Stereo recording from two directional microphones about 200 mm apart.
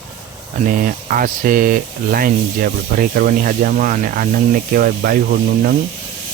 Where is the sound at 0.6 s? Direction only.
45° right (ahead or behind).